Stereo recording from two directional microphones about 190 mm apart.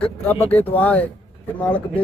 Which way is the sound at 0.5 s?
10° left (ahead or behind).